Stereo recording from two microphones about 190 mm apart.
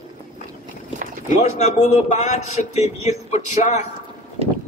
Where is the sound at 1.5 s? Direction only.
35° left (ahead or behind).